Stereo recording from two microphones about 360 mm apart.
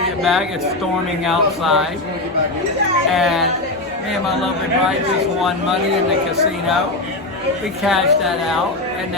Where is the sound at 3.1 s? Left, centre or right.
Centre.